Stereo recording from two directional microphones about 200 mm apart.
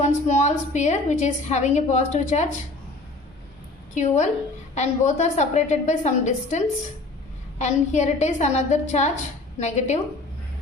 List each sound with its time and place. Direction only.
0.0 s a woman's voice: 35° left (ahead or behind)
3.9 s a woman's voice: 35° left (ahead or behind)
7.6 s a woman's voice: 35° left (ahead or behind)